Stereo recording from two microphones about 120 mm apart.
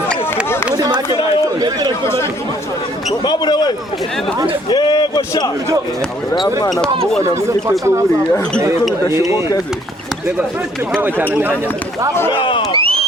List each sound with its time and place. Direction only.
0.7 s a sound: 35° right (ahead or behind)
3.2 s speech: 35° left (ahead or behind)
7.4 s speech: 25° right (ahead or behind)
9.1 s speech: 25° right (ahead or behind)
12.3 s a sound: 45° left (ahead or behind)
12.7 s crowd: 50° right (ahead or behind)